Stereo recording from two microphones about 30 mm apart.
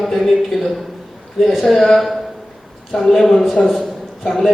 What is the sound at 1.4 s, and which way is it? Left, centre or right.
Speech, centre.